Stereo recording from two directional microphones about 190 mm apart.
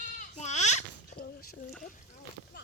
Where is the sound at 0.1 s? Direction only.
40° left (ahead or behind).